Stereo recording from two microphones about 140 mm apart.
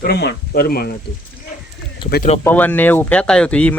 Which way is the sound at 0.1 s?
90° left.